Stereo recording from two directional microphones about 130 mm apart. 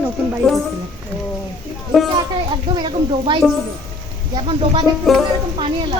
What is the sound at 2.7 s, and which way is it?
Speech, 35° right (ahead or behind).